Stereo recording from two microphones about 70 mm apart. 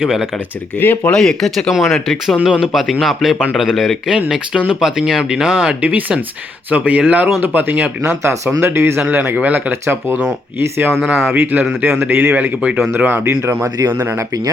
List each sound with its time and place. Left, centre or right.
0.0 s speech: centre
0.8 s speech: left
1.1 s speech: centre
5.8 s speech: right
8.0 s speech: centre
8.6 s speech: right
9.0 s speech: right
9.8 s speech: right
11.0 s speech: centre
11.8 s speech: right